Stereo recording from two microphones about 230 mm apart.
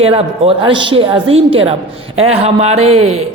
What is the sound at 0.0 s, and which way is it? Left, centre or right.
A man's voice, right.